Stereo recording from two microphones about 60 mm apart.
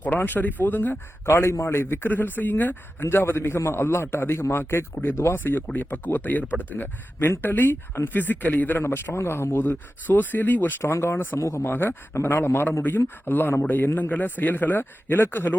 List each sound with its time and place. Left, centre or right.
0.0 s speech: left
8.8 s speech: left
9.6 s speech: left
10.9 s speech: left
11.3 s speech: left